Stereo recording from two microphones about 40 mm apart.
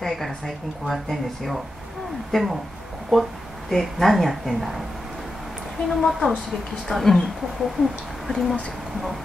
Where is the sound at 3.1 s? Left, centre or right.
Centre.